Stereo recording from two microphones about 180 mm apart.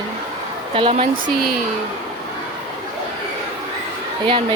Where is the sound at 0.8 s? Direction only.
30° right (ahead or behind).